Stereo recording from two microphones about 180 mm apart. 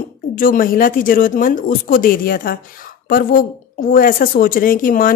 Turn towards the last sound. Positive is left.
turn(degrees=50)  # may be behind; listen again after turning